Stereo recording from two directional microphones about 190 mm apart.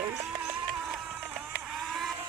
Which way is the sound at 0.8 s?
5° right (ahead or behind).